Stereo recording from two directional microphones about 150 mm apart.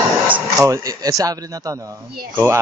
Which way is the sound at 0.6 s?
25° right (ahead or behind).